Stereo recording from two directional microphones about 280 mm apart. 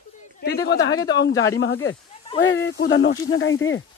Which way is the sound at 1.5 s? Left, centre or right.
Left.